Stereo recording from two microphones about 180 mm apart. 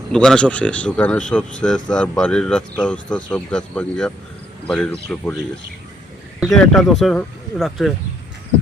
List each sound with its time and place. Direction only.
0.1 s speech: 5° left (ahead or behind)
6.4 s speech: centre (ahead or behind)